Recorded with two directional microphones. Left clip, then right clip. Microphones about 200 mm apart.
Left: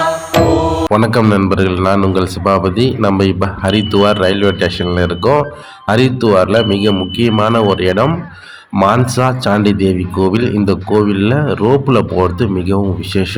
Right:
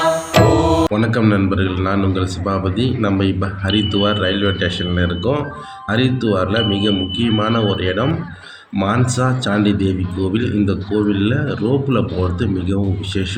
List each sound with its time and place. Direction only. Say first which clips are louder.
0.0 s music: left 2 dB; centre (ahead or behind)
0.9 s a man's voice: left 5 dB; 40° left (ahead or behind)